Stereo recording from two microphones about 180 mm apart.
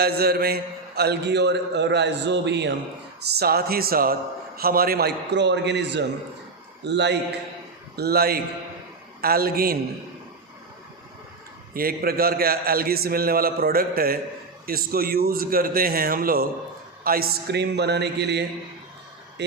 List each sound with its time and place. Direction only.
0.0 s a man's voice: 60° right (ahead or behind)
3.3 s a man's voice: 60° right (ahead or behind)
7.9 s a man's voice: 60° right (ahead or behind)
11.7 s a man's voice: 55° right (ahead or behind); by 18.4 s 70° right (ahead or behind)